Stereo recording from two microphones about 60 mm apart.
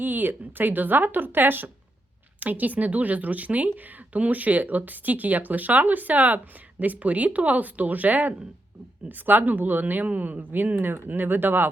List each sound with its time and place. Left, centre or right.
0.0 s speech: right